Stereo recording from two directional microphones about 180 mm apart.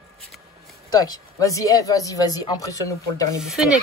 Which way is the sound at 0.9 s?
20° left (ahead or behind).